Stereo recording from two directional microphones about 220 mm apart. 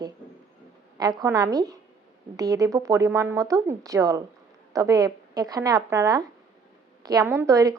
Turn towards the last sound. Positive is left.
turn(degrees=-15)  # may be behind; listen again after turning